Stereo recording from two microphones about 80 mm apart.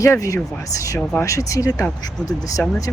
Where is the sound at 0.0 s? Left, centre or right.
Left.